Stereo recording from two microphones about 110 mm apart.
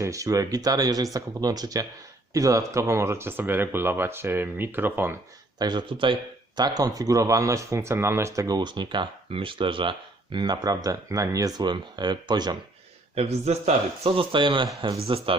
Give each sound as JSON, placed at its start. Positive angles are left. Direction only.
{"t": 0.0, "sound": "speech", "side_deg": -30}
{"t": 5.5, "sound": "speech", "side_deg": -45}
{"t": 6.6, "sound": "speech", "side_deg": -35}
{"t": 13.1, "sound": "speech", "side_deg": -75}
{"t": 14.9, "sound": "speech", "side_deg": -65}